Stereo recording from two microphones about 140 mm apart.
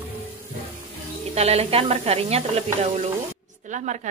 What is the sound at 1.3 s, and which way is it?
Speech, 50° right (ahead or behind).